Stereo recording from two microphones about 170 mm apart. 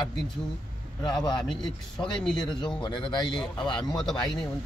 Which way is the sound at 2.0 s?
5° left (ahead or behind).